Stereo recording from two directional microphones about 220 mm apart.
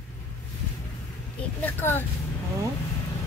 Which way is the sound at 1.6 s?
10° left (ahead or behind).